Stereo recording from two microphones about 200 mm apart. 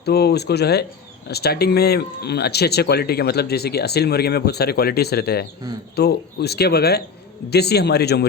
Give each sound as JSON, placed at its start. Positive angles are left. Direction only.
{"t": 0.0, "sound": "a man's voice", "side_deg": 55}